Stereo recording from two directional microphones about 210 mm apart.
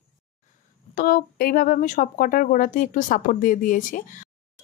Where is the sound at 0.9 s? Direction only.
45° left (ahead or behind).